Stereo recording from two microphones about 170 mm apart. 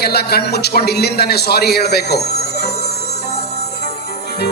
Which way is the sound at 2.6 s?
40° left (ahead or behind).